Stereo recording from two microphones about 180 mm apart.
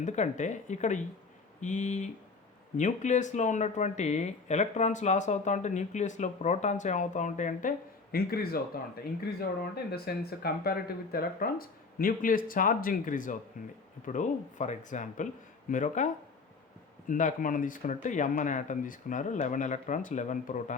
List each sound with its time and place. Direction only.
0.0 s speech: 40° left (ahead or behind)
8.1 s speech: 60° left (ahead or behind)
17.1 s speech: 45° left (ahead or behind)